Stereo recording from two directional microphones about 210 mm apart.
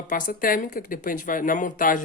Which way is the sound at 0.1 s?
40° left (ahead or behind).